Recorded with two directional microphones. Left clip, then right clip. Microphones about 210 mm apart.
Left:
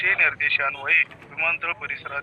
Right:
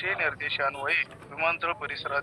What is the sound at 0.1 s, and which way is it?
Speech, 20° right (ahead or behind).